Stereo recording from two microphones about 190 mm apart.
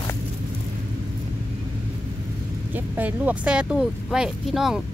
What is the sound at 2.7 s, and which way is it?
Speech, 10° right (ahead or behind).